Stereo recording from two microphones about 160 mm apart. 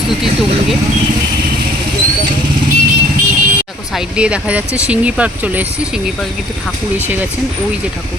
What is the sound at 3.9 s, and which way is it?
Speech, 5° right (ahead or behind).